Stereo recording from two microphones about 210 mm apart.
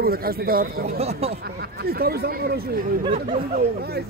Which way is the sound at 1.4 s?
50° right (ahead or behind).